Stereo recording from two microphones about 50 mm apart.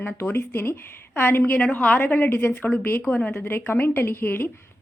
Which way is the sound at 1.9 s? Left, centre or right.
Left.